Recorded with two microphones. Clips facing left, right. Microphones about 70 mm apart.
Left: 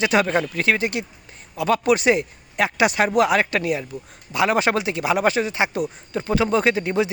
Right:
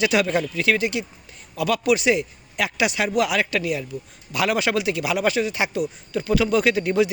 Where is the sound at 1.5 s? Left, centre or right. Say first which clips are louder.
Left 2 dB; left.